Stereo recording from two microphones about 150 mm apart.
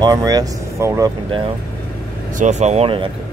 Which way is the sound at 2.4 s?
50° right (ahead or behind).